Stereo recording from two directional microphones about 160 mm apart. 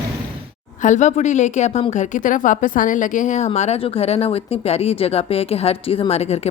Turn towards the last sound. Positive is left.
turn(degrees=40)  # may be behind; listen again after turning